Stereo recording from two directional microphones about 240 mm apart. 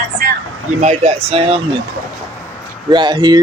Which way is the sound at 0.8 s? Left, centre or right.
Right.